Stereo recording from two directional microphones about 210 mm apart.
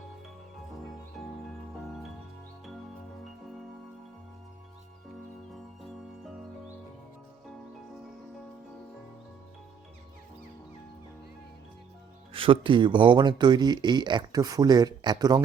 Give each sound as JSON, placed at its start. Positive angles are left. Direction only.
{"t": 1.2, "sound": "music", "side_deg": 0}
{"t": 5.8, "sound": "music", "side_deg": 0}
{"t": 12.3, "sound": "speech", "side_deg": -25}